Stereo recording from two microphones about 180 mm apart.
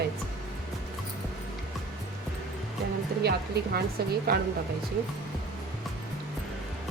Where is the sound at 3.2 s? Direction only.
60° right (ahead or behind).